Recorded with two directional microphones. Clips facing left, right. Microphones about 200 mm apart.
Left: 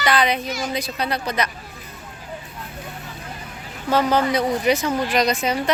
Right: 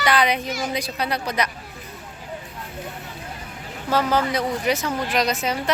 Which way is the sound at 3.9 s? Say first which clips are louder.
Left 2 dB; 5° right (ahead or behind).